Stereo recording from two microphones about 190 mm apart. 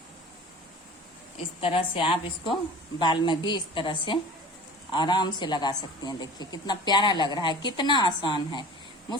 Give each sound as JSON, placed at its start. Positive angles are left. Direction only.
{"t": 1.6, "sound": "a woman's voice", "side_deg": 30}